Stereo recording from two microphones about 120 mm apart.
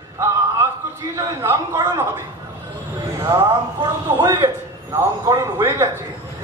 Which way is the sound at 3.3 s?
35° right (ahead or behind).